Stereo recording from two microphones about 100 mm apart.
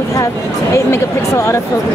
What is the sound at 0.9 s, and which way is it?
Speech, 30° left (ahead or behind).